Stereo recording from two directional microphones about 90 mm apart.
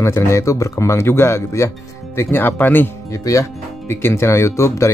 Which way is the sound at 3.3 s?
40° left (ahead or behind).